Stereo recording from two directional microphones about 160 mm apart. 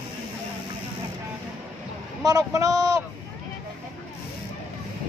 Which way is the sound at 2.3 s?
20° right (ahead or behind).